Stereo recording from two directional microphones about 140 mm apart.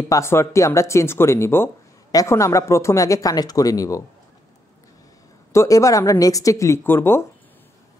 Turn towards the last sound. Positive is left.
turn(degrees=15)  # may be behind; listen again after turning